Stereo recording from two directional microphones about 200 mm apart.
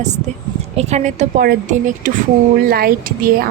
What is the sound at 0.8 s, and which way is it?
Speech, 35° right (ahead or behind).